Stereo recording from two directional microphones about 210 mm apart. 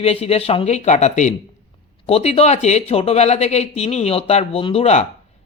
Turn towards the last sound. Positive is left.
turn(degrees=30)  # may be behind; listen again after turning